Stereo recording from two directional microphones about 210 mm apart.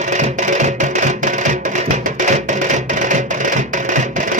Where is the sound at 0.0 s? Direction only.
35° right (ahead or behind).